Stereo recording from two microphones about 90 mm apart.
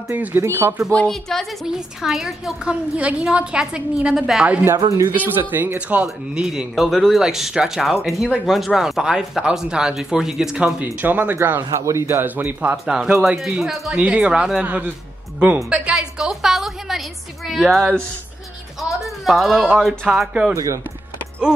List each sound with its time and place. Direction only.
0.1 s speech: 20° right (ahead or behind)
0.9 s a woman's voice: 5° left (ahead or behind)
5.1 s speech: 20° right (ahead or behind)
6.0 s a man's voice: 5° right (ahead or behind)
10.8 s speech: 20° right (ahead or behind)
11.7 s speech: 35° right (ahead or behind)
12.8 s a woman's voice: 10° right (ahead or behind)
20.5 s speech: 35° right (ahead or behind)